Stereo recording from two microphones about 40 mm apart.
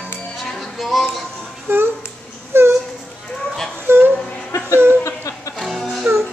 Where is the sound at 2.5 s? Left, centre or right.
Right.